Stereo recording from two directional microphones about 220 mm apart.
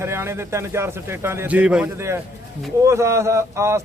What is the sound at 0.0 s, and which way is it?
A man's voice, 10° right (ahead or behind).